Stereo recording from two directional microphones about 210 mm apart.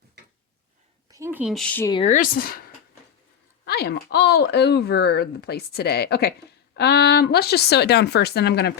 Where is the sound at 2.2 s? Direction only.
45° left (ahead or behind).